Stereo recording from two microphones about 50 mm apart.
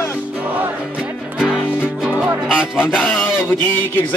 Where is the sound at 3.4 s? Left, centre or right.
Left.